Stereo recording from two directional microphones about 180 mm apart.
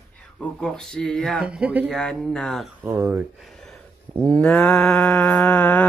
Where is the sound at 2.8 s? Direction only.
15° right (ahead or behind).